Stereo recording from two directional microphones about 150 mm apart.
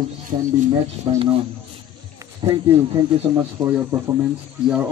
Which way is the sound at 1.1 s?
35° right (ahead or behind).